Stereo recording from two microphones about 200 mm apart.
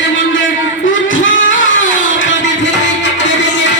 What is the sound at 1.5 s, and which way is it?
Music, 70° left (ahead or behind).